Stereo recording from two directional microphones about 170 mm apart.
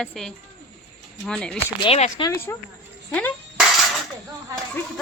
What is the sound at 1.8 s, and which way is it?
Speech, 35° left (ahead or behind).